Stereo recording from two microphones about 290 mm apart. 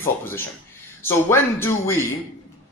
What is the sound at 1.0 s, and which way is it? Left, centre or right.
Speech, centre.